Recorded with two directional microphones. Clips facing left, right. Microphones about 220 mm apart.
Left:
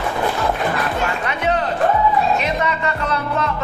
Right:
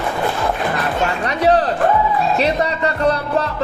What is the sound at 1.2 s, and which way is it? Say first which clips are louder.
Music: right 5 dB; 35° right (ahead or behind).